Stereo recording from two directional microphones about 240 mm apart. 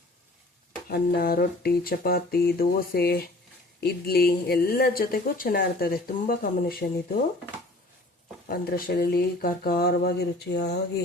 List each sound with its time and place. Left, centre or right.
0.9 s speech: left
8.4 s speech: left